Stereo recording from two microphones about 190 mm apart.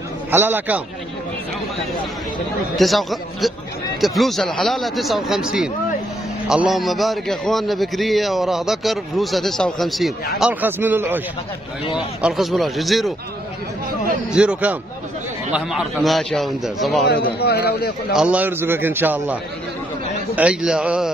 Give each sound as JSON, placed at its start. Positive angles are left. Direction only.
{"t": 0.3, "sound": "a man's voice", "side_deg": -10}
{"t": 2.7, "sound": "a man's voice", "side_deg": 0}
{"t": 14.3, "sound": "a man's voice", "side_deg": -5}
{"t": 17.1, "sound": "a man's voice", "side_deg": 55}
{"t": 18.1, "sound": "a man's voice", "side_deg": -5}
{"t": 20.3, "sound": "a man's voice", "side_deg": -5}